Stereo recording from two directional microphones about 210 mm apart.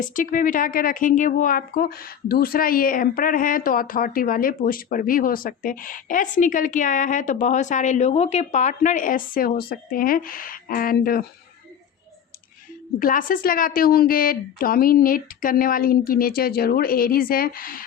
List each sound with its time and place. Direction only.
0.0 s speech: 40° left (ahead or behind)
13.0 s a woman's voice: 40° left (ahead or behind)